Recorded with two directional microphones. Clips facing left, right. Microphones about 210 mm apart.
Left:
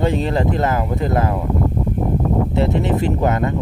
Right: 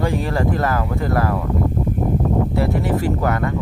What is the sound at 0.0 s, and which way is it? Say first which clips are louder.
Speech: left 2 dB; 20° left (ahead or behind).